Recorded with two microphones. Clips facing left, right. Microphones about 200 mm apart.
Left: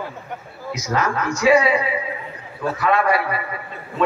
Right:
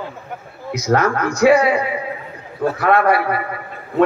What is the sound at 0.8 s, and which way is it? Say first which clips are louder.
A man's voice: right 5 dB; 60° right (ahead or behind).